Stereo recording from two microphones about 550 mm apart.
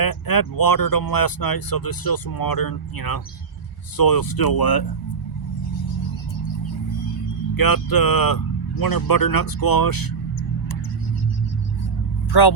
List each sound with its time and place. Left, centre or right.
0.0 s speech: left
7.5 s speech: left
12.3 s speech: left